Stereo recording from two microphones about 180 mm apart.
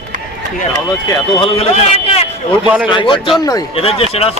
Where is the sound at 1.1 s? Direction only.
30° left (ahead or behind).